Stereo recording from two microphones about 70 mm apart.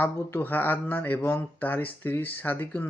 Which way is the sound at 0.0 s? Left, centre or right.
Left.